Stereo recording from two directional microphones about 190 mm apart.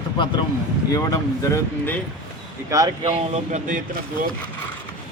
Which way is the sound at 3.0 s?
40° right (ahead or behind).